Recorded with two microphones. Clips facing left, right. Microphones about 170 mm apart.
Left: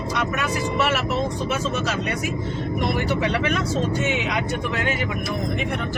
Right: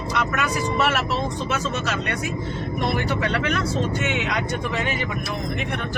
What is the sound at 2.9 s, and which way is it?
Speech, 10° left (ahead or behind).